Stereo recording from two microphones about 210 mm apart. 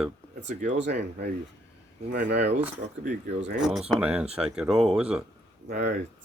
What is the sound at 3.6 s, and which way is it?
Speech, centre (ahead or behind).